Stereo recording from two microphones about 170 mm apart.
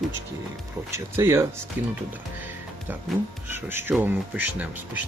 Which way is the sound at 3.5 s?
15° right (ahead or behind).